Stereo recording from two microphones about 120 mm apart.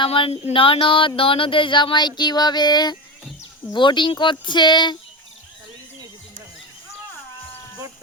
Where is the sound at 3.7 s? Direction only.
40° left (ahead or behind).